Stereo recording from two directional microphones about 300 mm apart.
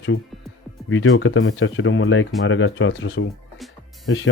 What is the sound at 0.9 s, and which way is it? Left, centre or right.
Speech, left.